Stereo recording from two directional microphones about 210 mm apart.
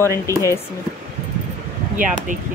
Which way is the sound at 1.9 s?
40° right (ahead or behind).